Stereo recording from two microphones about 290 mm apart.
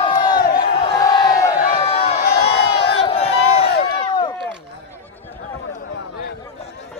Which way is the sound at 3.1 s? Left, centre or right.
Centre.